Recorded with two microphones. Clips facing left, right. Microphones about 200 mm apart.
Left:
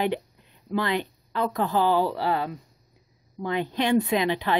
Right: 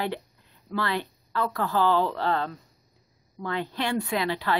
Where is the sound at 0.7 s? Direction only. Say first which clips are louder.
Left 3 dB; 15° left (ahead or behind).